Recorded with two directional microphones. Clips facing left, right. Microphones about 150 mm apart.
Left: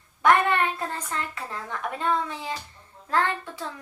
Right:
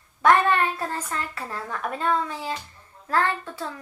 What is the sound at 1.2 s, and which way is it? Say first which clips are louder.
A child's voice: right 1 dB; 20° left (ahead or behind).